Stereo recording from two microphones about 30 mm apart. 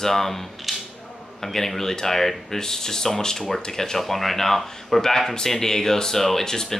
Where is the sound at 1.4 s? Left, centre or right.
Centre.